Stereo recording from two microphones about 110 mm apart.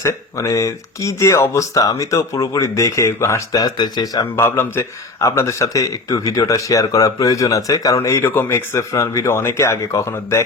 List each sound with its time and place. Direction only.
0.0 s a man's voice: 25° left (ahead or behind)
4.4 s a man's voice: 20° left (ahead or behind)